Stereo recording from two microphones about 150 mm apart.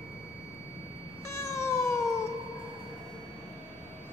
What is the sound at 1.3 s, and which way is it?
Cat, 20° left (ahead or behind).